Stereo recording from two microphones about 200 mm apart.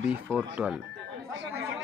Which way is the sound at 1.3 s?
65° right (ahead or behind).